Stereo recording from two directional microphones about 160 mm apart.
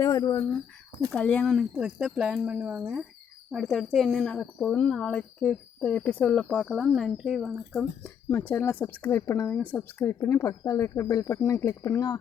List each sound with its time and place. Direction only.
0.0 s speech: 20° left (ahead or behind)
1.1 s speech: 5° left (ahead or behind)
8.3 s a woman's voice: 15° left (ahead or behind)